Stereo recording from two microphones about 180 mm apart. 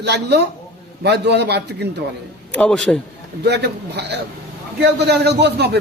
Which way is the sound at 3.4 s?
70° right (ahead or behind).